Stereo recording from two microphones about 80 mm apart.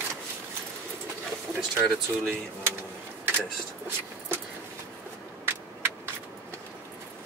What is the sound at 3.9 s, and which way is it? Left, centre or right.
Vehicle, right.